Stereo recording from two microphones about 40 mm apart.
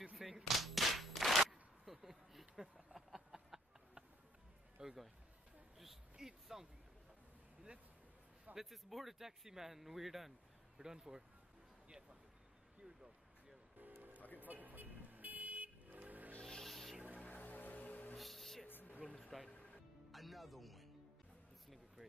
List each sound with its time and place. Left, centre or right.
0.2 s cap gun: centre
4.8 s speech: centre
6.1 s speech: centre
8.5 s speech: centre
12.8 s a sound: centre
13.7 s music: right
14.2 s music: left
14.5 s vehicle: right
16.4 s music: centre
17.2 s music: left
18.1 s music: centre
18.7 s a sound: left
19.0 s a sound: left
20.1 s music: centre